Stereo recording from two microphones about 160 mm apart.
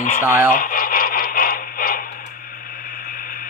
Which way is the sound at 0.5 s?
60° left (ahead or behind).